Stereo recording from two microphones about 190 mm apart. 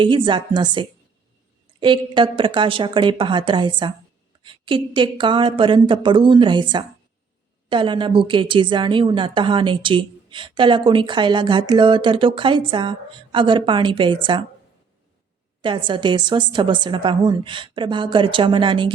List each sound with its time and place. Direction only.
0.0 s a woman's voice: 25° right (ahead or behind)
15.6 s a woman's voice: 25° right (ahead or behind)